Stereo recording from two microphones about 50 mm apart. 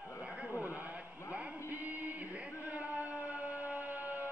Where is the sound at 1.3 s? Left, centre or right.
Right.